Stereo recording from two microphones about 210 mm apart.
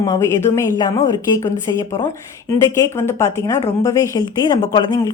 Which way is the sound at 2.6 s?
15° left (ahead or behind).